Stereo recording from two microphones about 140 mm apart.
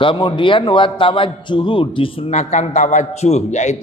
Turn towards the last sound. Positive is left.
turn(degrees=55)  # may be behind; listen again after turning